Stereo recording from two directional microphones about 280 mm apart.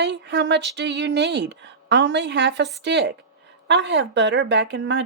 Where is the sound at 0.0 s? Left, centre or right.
Right.